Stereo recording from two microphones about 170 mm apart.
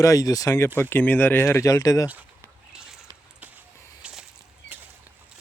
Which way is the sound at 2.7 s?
5° right (ahead or behind).